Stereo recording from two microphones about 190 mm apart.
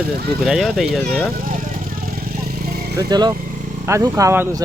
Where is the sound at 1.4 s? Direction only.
45° right (ahead or behind).